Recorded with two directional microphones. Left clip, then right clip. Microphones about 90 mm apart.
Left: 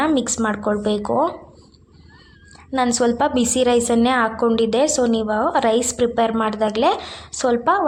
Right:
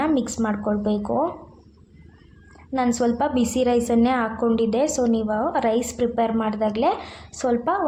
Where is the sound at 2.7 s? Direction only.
20° left (ahead or behind).